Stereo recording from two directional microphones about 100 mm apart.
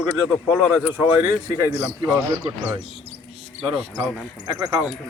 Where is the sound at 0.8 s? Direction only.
25° right (ahead or behind).